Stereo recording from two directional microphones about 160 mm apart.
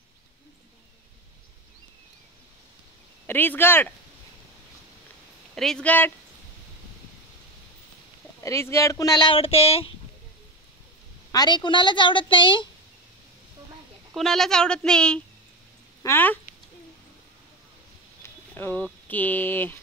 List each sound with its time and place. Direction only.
3.3 s speech: 15° left (ahead or behind)
5.5 s speech: 5° left (ahead or behind)
8.4 s speech: 20° left (ahead or behind); by 9.8 s 35° left (ahead or behind)
11.3 s speech: 25° left (ahead or behind)
14.1 s speech: centre (ahead or behind)
18.6 s speech: 15° left (ahead or behind)